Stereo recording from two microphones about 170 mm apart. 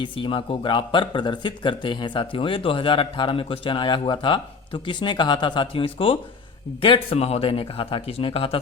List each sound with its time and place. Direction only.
0.0 s speech: 30° left (ahead or behind)